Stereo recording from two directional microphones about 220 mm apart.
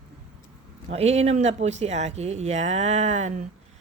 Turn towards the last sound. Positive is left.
turn(degrees=-30)  # may be behind; listen again after turning